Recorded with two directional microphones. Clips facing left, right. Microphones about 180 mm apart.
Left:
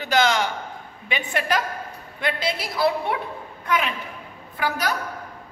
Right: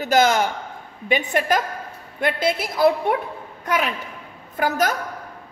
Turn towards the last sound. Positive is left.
turn(degrees=-45)  # may be behind; listen again after turning